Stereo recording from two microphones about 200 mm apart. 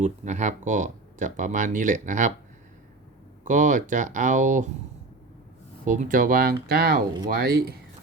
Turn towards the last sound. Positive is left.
turn(degrees=-50)  # may be behind; listen again after turning